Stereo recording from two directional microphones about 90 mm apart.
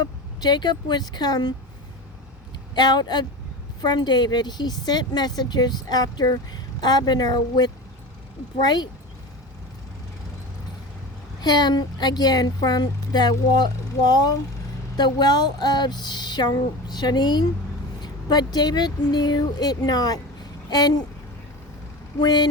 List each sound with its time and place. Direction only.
0.0 s a woman's voice: 50° left (ahead or behind)
2.7 s a woman's voice: 50° left (ahead or behind)
11.3 s a woman's voice: 50° left (ahead or behind)
22.2 s a woman's voice: 50° left (ahead or behind)